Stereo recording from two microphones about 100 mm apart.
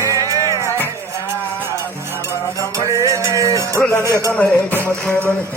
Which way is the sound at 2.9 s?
30° right (ahead or behind).